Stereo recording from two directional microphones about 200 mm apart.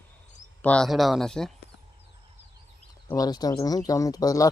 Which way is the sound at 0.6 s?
5° left (ahead or behind).